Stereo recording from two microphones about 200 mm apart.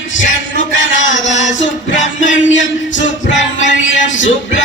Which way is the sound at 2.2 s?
70° left (ahead or behind).